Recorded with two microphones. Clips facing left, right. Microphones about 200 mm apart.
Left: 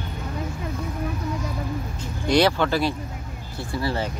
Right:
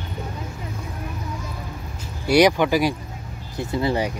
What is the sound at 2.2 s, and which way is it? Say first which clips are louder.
Speech: right 3 dB; 10° right (ahead or behind).